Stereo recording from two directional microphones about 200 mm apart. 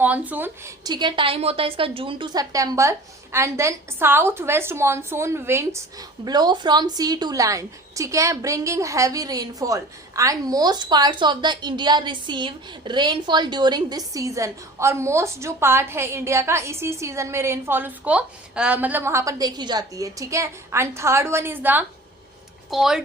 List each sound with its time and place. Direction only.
0.0 s a woman's voice: 10° right (ahead or behind)